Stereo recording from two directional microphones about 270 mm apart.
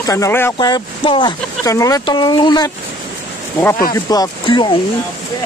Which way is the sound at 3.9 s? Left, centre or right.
Centre.